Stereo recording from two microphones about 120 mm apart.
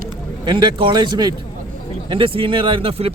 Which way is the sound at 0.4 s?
40° right (ahead or behind).